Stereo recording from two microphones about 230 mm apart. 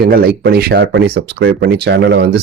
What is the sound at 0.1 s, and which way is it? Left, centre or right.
Speech, right.